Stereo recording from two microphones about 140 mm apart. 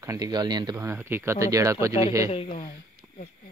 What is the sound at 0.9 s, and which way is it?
Speech, 15° right (ahead or behind).